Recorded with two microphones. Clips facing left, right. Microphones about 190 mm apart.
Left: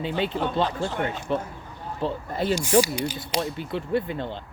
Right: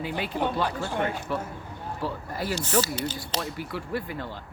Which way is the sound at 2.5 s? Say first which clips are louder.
Left 6 dB; 10° left (ahead or behind).